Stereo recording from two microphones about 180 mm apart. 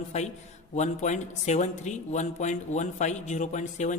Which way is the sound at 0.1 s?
40° left (ahead or behind).